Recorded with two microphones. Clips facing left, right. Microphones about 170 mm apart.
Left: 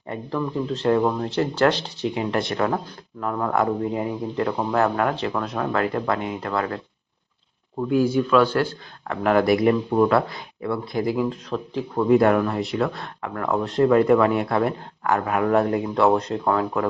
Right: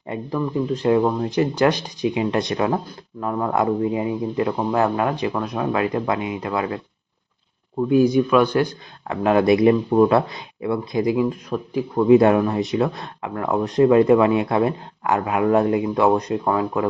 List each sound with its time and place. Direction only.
0.1 s speech: 10° right (ahead or behind)
7.8 s speech: 20° right (ahead or behind)